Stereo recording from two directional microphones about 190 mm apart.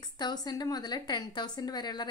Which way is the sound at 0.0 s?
20° left (ahead or behind).